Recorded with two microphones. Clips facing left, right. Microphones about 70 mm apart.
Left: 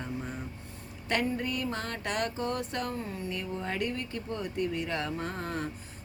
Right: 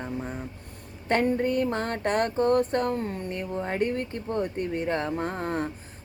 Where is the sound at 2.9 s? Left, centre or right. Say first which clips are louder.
Right 6 dB; right.